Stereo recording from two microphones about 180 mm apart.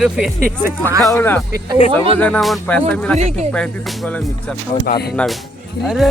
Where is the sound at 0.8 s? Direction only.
15° right (ahead or behind).